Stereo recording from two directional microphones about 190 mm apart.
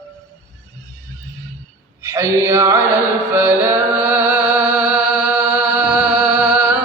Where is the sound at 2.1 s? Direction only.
15° right (ahead or behind).